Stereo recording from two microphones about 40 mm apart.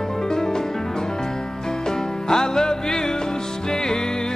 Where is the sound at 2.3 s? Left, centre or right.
Centre.